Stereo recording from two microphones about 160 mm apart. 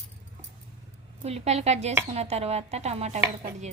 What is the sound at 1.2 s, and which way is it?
A woman's voice, 40° right (ahead or behind).